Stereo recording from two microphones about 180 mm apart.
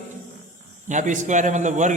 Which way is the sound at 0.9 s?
45° right (ahead or behind).